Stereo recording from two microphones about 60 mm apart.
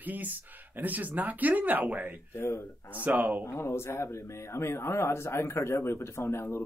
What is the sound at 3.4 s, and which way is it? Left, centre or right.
Speech, left.